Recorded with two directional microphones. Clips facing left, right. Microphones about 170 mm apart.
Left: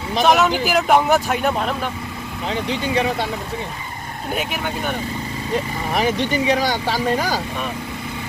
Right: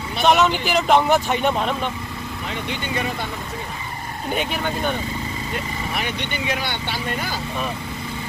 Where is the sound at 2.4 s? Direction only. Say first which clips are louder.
Left 7 dB; 35° left (ahead or behind).